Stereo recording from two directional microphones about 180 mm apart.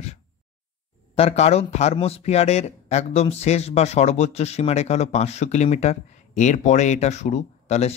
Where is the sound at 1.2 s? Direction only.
35° left (ahead or behind).